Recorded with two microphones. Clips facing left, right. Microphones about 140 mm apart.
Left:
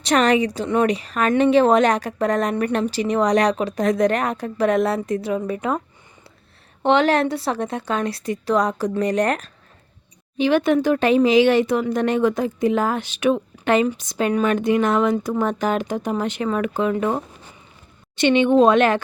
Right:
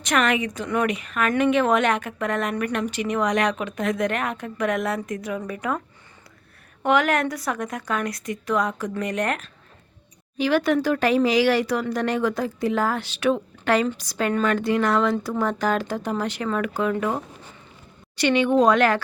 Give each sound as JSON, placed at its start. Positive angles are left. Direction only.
{"t": 0.0, "sound": "a woman's voice", "side_deg": 35}
{"t": 6.8, "sound": "a woman's voice", "side_deg": 30}
{"t": 10.3, "sound": "speech", "side_deg": 20}
{"t": 18.2, "sound": "speech", "side_deg": 20}